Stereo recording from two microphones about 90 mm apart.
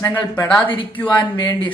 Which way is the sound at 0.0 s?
25° left (ahead or behind).